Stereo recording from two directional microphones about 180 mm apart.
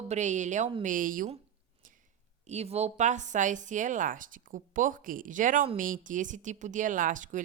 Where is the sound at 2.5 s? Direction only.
35° right (ahead or behind).